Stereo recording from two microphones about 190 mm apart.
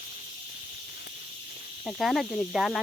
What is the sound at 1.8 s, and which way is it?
Speech, centre (ahead or behind).